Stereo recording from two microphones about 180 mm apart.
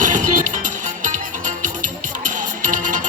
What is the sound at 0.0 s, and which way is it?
Music, 45° right (ahead or behind).